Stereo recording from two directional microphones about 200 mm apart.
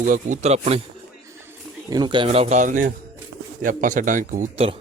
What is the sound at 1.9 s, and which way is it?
A man's voice, 20° right (ahead or behind).